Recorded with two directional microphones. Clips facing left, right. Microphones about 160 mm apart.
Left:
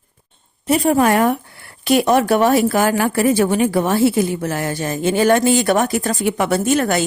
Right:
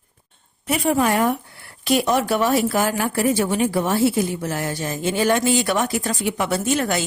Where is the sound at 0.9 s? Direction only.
60° left (ahead or behind).